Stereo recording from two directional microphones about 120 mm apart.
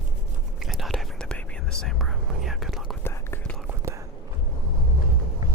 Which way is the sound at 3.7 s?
25° right (ahead or behind).